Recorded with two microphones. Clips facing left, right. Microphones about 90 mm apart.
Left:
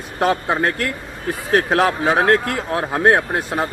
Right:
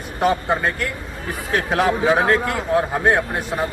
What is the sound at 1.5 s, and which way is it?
Speech, 50° left (ahead or behind).